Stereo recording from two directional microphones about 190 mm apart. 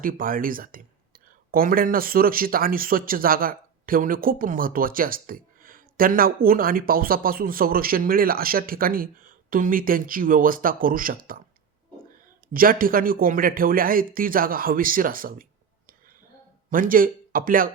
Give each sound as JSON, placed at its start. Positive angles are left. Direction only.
{"t": 0.0, "sound": "speech", "side_deg": -45}
{"t": 12.5, "sound": "speech", "side_deg": -50}
{"t": 16.6, "sound": "speech", "side_deg": -45}